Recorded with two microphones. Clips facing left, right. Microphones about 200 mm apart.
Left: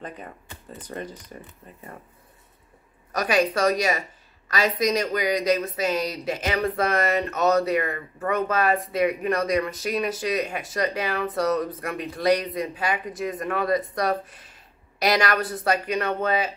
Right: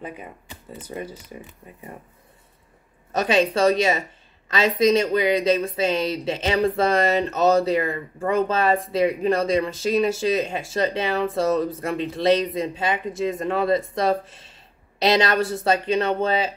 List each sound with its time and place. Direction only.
0.0 s speech: 10° right (ahead or behind)
3.1 s speech: 25° right (ahead or behind)